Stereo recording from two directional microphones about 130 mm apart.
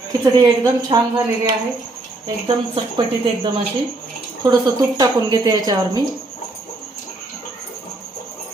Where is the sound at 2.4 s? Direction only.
40° right (ahead or behind).